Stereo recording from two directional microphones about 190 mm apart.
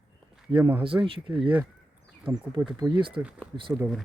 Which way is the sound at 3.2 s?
5° right (ahead or behind).